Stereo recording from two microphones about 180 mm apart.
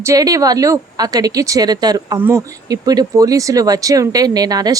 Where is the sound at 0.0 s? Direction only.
20° right (ahead or behind).